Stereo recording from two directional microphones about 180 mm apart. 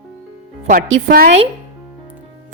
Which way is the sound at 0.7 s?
45° right (ahead or behind).